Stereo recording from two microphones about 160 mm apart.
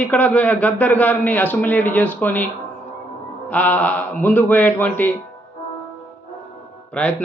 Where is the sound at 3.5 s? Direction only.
10° left (ahead or behind).